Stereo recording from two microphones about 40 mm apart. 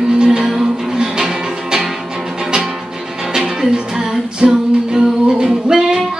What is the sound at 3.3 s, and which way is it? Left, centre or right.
Music, centre.